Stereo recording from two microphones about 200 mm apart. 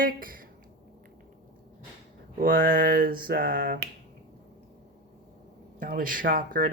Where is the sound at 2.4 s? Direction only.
45° right (ahead or behind).